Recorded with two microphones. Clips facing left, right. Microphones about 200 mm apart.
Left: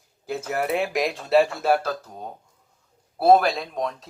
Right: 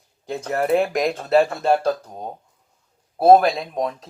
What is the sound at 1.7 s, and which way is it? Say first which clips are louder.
Speech: right 5 dB; 30° right (ahead or behind).